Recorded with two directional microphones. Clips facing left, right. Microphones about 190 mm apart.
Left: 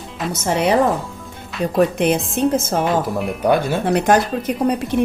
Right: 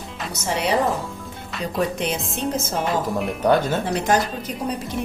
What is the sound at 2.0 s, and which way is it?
Speech, 55° left (ahead or behind).